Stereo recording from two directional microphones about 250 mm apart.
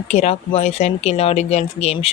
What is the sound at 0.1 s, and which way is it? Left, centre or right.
Speech, left.